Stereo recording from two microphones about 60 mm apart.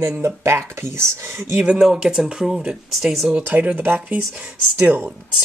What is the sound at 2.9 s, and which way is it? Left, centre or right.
Speech, centre.